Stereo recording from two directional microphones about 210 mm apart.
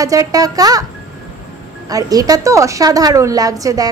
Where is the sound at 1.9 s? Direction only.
15° right (ahead or behind).